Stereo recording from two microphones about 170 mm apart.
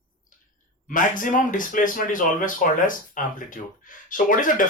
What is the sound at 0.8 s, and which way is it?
Speech, 50° left (ahead or behind).